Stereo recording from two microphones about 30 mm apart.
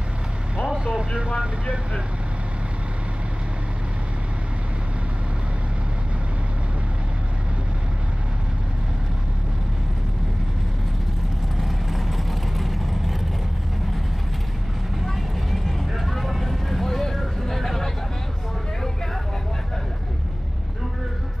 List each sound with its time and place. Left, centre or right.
0.6 s vehicle: right
11.6 s vehicle: centre
15.1 s vehicle: centre